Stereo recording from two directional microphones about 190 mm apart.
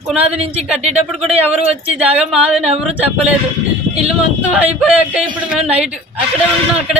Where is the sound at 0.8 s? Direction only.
35° right (ahead or behind).